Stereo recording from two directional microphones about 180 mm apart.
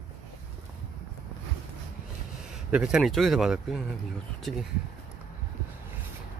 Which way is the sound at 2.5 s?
5° right (ahead or behind).